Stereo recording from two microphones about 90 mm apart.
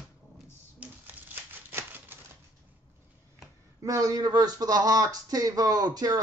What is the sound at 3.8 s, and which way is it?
Speech, 40° right (ahead or behind).